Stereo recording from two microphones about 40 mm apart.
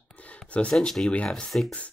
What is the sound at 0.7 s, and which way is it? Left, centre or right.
Speech, centre.